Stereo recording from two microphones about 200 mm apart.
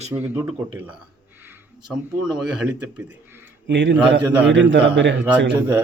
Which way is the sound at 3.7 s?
60° right (ahead or behind).